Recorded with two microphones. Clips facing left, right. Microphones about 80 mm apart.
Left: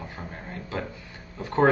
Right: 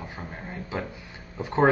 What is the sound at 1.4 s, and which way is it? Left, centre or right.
Speech, centre.